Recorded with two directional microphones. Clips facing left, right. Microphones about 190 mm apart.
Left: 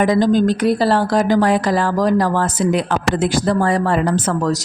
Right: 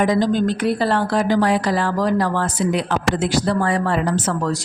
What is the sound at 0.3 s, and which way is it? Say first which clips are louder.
Speech: left 4 dB; 40° left (ahead or behind).